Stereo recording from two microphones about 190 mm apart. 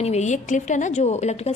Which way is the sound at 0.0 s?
35° left (ahead or behind).